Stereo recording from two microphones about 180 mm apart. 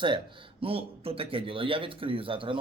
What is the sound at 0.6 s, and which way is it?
A man's voice, 30° right (ahead or behind).